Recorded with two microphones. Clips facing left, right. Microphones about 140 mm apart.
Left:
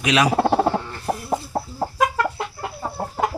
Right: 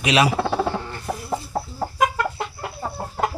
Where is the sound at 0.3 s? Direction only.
45° left (ahead or behind).